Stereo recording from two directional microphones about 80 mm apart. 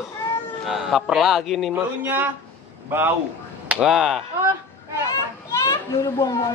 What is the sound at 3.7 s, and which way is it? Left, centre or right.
Speech, centre.